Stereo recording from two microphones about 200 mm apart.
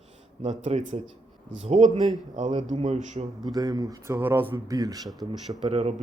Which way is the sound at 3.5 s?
20° right (ahead or behind).